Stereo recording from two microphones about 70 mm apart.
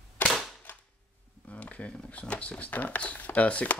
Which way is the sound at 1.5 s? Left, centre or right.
Centre.